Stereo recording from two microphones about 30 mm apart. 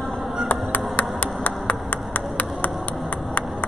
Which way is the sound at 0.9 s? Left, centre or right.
Left.